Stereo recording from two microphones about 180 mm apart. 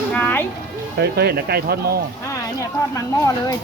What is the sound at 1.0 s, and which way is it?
Speech, 60° right (ahead or behind).